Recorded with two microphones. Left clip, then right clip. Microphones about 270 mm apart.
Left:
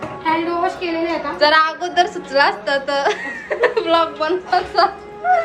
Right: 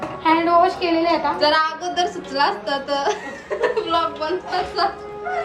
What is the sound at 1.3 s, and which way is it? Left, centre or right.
A woman's voice, centre.